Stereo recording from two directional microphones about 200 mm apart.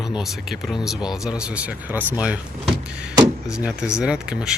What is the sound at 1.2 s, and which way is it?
Speech, 5° right (ahead or behind).